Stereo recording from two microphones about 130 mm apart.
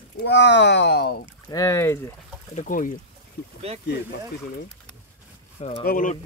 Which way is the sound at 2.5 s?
90° left.